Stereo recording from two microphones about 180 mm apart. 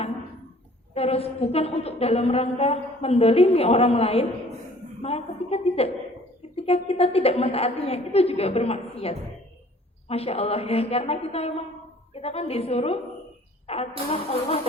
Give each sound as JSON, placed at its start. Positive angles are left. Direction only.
{"t": 0.9, "sound": "a woman's voice", "side_deg": 35}